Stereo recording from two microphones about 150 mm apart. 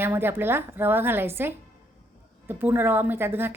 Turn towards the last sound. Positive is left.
turn(degrees=-15)  # may be behind; listen again after turning